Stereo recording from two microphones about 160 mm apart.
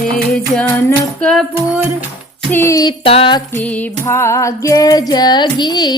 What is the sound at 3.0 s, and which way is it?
Music, 35° left (ahead or behind).